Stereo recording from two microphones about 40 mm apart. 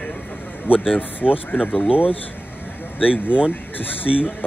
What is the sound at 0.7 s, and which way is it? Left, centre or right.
Speech, left.